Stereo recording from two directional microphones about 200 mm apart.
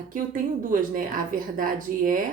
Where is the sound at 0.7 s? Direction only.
40° right (ahead or behind).